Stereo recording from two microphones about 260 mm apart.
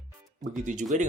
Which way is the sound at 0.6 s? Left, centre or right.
Right.